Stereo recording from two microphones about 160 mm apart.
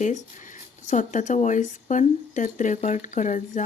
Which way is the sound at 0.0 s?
50° left (ahead or behind).